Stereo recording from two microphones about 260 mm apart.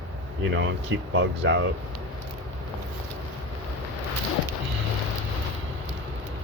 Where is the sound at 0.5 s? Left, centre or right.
Right.